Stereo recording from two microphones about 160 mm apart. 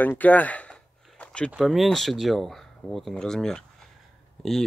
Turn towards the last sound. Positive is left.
turn(degrees=5)  # may be behind; listen again after turning